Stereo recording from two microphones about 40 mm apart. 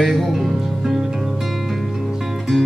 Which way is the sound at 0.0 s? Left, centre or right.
Centre.